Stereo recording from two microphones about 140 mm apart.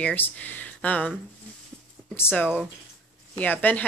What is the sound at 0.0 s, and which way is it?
Speech, 10° left (ahead or behind).